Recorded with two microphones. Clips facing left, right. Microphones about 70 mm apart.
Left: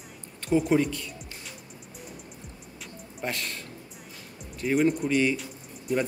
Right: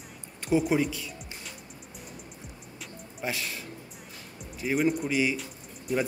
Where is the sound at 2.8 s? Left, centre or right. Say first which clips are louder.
Left 1 dB; centre.